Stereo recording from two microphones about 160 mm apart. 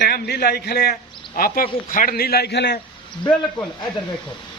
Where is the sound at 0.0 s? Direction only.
80° left.